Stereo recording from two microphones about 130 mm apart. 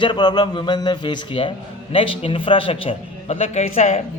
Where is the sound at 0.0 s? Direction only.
35° left (ahead or behind).